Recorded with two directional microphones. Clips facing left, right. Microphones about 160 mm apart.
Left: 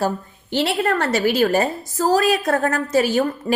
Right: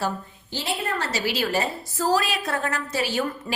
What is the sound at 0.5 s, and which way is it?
A woman's voice, 70° left (ahead or behind).